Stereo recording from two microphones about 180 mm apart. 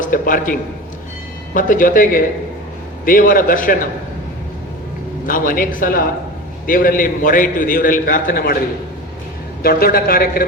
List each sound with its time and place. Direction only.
0.0 s a man's voice: 50° left (ahead or behind)
1.5 s a man's voice: 50° left (ahead or behind)
5.2 s a man's voice: 50° left (ahead or behind)
9.6 s a man's voice: 55° left (ahead or behind)